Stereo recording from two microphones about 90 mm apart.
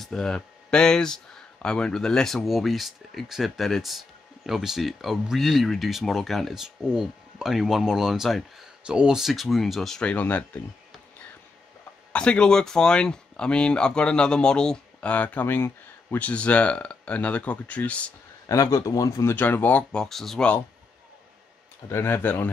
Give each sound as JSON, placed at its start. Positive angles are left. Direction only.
{"t": 0.0, "sound": "speech", "side_deg": 5}
{"t": 12.1, "sound": "speech", "side_deg": 10}
{"t": 18.5, "sound": "speech", "side_deg": 40}
{"t": 19.3, "sound": "speech", "side_deg": 20}
{"t": 21.8, "sound": "speech", "side_deg": 25}